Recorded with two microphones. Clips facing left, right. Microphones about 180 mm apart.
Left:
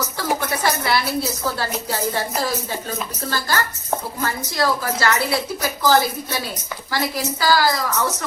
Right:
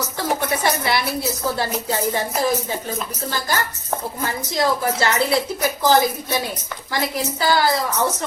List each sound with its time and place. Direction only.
0.2 s a sound: 20° right (ahead or behind)
1.9 s a woman's voice: 20° right (ahead or behind)
3.2 s a woman's voice: 15° right (ahead or behind)
7.4 s a woman's voice: 25° right (ahead or behind)